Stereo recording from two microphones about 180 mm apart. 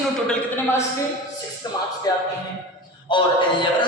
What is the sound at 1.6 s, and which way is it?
A man's voice, 20° left (ahead or behind).